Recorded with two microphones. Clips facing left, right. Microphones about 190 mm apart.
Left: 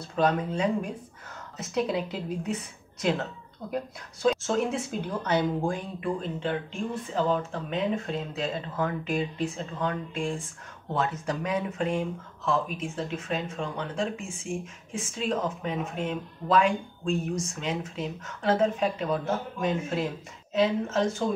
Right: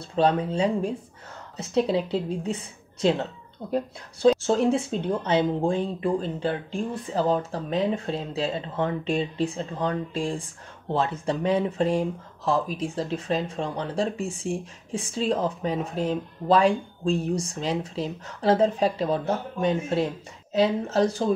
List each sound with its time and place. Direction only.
0.0 s speech: 30° right (ahead or behind)